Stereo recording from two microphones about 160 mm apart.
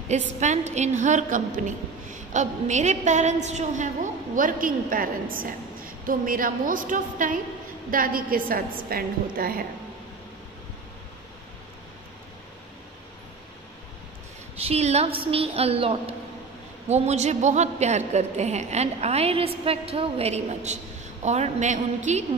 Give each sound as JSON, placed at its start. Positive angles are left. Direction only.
{"t": 0.1, "sound": "a woman's voice", "side_deg": -45}
{"t": 14.6, "sound": "a woman's voice", "side_deg": -40}